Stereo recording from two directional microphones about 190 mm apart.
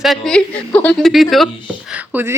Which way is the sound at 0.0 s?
Centre (ahead or behind).